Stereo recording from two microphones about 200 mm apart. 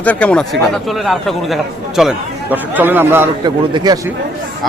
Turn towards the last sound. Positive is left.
turn(degrees=-20)  # may be behind; listen again after turning